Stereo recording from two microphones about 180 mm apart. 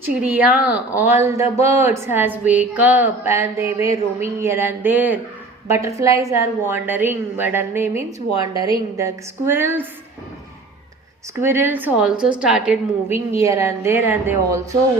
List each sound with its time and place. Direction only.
0.0 s a woman's voice: 10° right (ahead or behind)
11.3 s a woman's voice: 15° right (ahead or behind)